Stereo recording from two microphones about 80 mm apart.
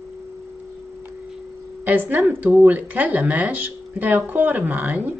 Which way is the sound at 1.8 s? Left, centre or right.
Right.